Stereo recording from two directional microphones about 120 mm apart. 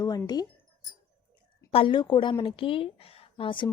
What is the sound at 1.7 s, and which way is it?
A woman's voice, 50° left (ahead or behind).